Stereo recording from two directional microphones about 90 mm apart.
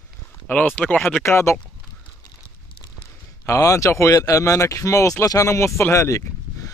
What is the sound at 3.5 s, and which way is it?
Speech, 35° left (ahead or behind).